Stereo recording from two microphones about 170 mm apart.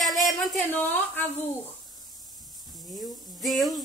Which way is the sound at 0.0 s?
Centre (ahead or behind).